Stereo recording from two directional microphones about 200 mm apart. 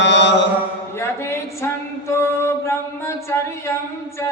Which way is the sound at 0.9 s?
10° left (ahead or behind).